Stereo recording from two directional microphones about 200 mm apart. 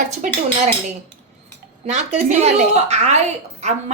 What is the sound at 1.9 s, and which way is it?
A woman's voice, 35° right (ahead or behind).